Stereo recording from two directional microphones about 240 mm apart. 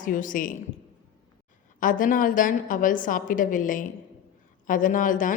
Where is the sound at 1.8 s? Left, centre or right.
Left.